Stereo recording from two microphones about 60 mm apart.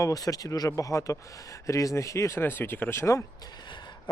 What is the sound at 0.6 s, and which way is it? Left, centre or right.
Speech, left.